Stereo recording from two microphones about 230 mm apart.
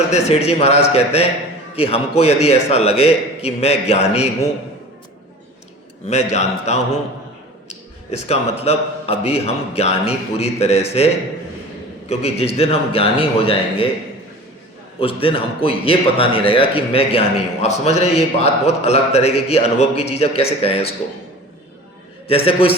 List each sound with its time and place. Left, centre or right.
0.1 s a man's voice: left
6.1 s a man's voice: left
14.9 s a man's voice: left
22.3 s a man's voice: left